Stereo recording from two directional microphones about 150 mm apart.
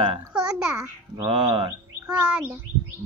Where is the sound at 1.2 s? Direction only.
40° right (ahead or behind).